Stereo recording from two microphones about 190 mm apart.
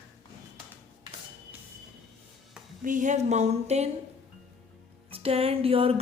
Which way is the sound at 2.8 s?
40° right (ahead or behind).